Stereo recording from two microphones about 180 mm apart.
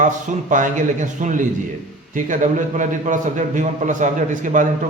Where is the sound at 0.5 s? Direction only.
45° right (ahead or behind).